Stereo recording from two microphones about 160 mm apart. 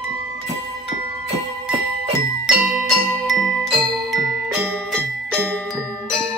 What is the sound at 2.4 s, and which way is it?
Music, 5° right (ahead or behind).